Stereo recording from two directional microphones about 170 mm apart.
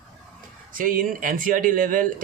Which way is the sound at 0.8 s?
55° right (ahead or behind).